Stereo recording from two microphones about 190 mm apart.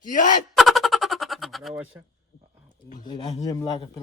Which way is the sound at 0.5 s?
Centre (ahead or behind).